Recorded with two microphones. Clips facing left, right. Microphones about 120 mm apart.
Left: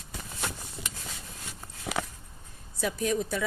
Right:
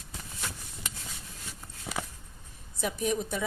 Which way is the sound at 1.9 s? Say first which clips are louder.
Left 4 dB; 70° left (ahead or behind).